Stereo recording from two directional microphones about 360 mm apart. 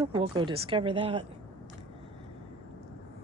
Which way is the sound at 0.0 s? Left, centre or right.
Centre.